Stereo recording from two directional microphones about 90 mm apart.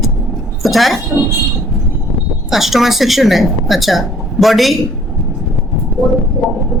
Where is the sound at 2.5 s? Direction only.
Centre (ahead or behind).